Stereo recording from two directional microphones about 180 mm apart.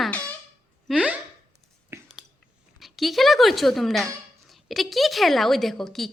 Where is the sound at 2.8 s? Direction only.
Centre (ahead or behind).